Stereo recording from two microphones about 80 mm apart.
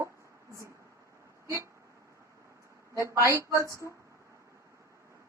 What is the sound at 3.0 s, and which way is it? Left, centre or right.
Speech, right.